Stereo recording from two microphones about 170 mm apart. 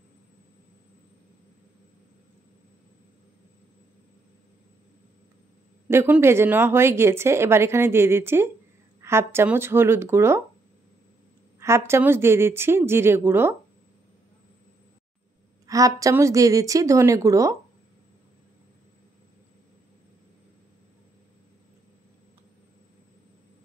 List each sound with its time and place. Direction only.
5.9 s speech: 10° right (ahead or behind)
11.6 s speech: 15° right (ahead or behind)
15.6 s a woman's voice: 20° right (ahead or behind)